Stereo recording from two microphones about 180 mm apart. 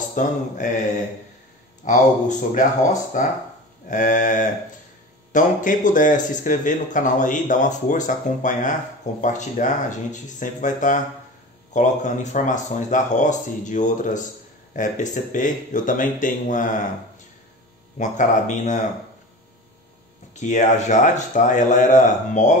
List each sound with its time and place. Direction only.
0.1 s speech: 45° left (ahead or behind)
1.9 s speech: 45° left (ahead or behind)
17.9 s speech: 45° left (ahead or behind)
20.3 s speech: 40° left (ahead or behind)